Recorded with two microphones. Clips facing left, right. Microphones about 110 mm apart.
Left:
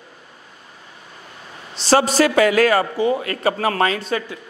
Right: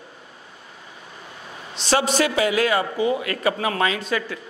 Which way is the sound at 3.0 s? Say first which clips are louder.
Left 2 dB; 35° left (ahead or behind).